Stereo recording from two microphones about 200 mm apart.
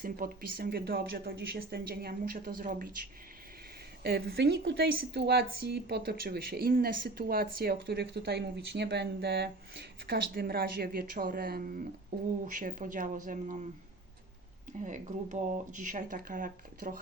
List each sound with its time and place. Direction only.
0.0 s speech: 45° right (ahead or behind)
4.0 s speech: 50° right (ahead or behind)
14.8 s speech: 40° right (ahead or behind)